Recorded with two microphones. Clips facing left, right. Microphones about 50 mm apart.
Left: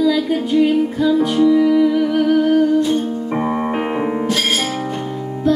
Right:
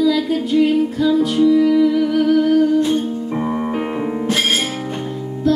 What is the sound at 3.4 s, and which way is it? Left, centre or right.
Keyboard, left.